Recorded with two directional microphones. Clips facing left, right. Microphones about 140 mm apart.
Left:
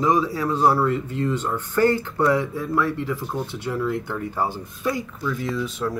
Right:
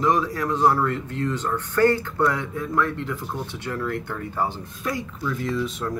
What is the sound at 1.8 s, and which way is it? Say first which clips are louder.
Speech: even; 10° left (ahead or behind).